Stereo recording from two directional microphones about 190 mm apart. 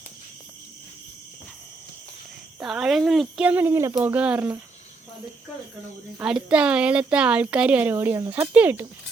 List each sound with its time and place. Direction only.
2.6 s speech: 5° right (ahead or behind)
6.1 s speech: 5° right (ahead or behind)